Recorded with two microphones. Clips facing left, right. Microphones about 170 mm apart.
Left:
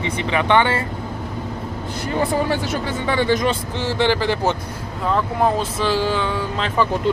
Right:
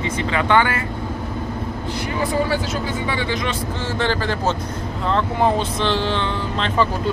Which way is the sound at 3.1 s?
45° left (ahead or behind).